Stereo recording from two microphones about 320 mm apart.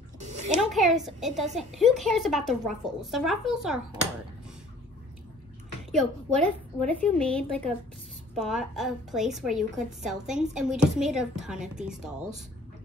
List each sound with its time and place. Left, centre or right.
0.2 s a sound: right
0.6 s a woman's voice: centre
5.9 s a woman's voice: centre